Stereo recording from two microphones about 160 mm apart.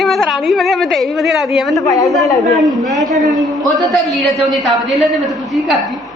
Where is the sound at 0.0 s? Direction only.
Centre (ahead or behind).